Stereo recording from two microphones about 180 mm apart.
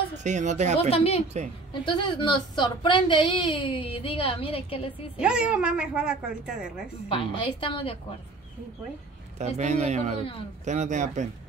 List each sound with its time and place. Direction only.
0.2 s a man's voice: 40° right (ahead or behind)
0.7 s a woman's voice: 35° left (ahead or behind)
5.1 s a woman's voice: 5° right (ahead or behind)
7.1 s a woman's voice: 30° left (ahead or behind)
9.4 s a man's voice: 40° right (ahead or behind)